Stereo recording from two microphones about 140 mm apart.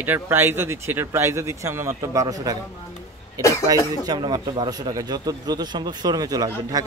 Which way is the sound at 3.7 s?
25° right (ahead or behind).